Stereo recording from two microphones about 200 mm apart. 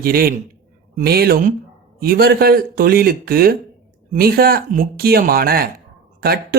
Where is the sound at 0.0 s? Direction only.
45° right (ahead or behind).